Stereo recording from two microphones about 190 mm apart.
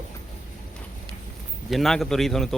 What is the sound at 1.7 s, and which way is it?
Speech, centre (ahead or behind).